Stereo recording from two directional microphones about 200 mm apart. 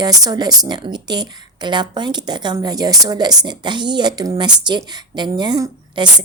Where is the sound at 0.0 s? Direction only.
20° right (ahead or behind).